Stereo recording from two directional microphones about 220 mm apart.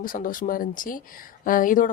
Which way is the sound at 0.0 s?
40° left (ahead or behind).